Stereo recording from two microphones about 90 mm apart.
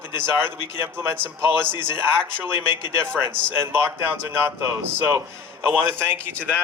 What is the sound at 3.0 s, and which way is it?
Speech, 25° right (ahead or behind).